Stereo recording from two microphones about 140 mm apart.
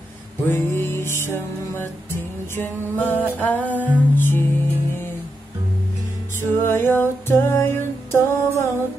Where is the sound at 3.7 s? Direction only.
10° right (ahead or behind).